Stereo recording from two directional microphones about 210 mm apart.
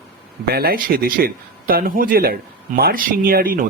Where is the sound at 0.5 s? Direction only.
45° right (ahead or behind).